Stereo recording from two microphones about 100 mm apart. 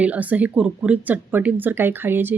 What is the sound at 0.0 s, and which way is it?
Speech, 15° right (ahead or behind).